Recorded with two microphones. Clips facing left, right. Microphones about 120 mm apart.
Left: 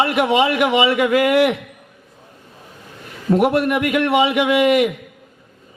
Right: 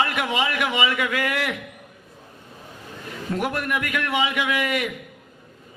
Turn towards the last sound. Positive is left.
turn(degrees=25)  # may be behind; listen again after turning